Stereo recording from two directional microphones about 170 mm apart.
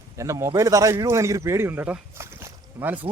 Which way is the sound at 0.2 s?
15° right (ahead or behind).